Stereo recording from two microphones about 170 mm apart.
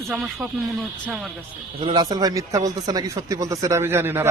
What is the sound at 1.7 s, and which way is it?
Speech, 30° right (ahead or behind).